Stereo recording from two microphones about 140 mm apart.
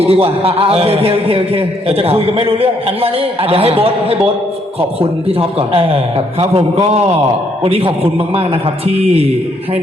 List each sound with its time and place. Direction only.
0.0 s a man's voice: 45° right (ahead or behind)